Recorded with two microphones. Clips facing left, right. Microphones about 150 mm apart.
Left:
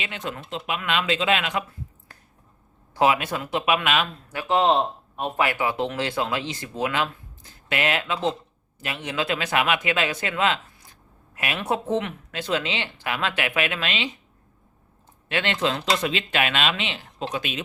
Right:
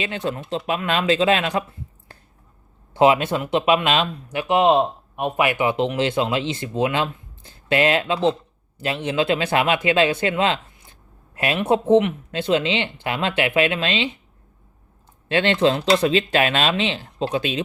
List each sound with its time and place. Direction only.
0.0 s speech: 35° right (ahead or behind)
2.9 s speech: 25° right (ahead or behind)
15.3 s speech: 30° right (ahead or behind)